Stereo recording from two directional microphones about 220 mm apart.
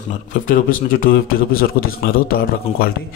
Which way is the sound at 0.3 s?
35° left (ahead or behind).